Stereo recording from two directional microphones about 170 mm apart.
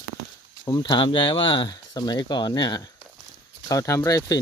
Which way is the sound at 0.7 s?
25° left (ahead or behind).